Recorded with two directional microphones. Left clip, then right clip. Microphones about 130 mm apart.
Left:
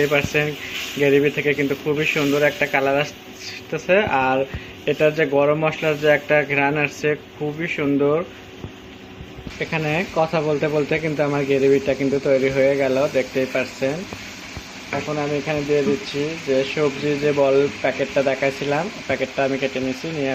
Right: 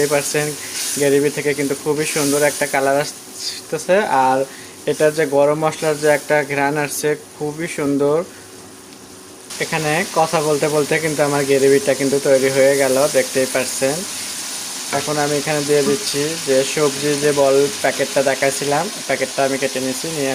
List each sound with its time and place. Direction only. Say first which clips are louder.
0.0 s speech: right 1 dB; 40° right (ahead or behind)
9.6 s speech: right 4 dB; 40° right (ahead or behind)
14.9 s speech: right 4 dB; 60° right (ahead or behind)
16.7 s speech: right 3 dB; 55° right (ahead or behind)